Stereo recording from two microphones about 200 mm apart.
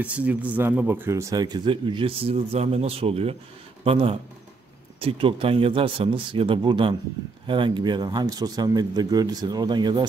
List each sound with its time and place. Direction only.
0.0 s speech: 5° right (ahead or behind); by 10.0 s 20° right (ahead or behind)